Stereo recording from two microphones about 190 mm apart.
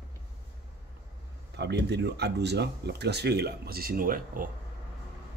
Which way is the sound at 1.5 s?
65° right (ahead or behind).